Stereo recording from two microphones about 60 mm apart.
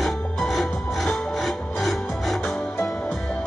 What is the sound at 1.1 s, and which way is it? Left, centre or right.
Music, centre.